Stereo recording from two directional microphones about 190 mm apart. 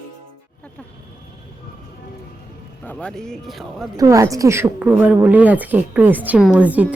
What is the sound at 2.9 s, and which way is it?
Speech, 5° left (ahead or behind).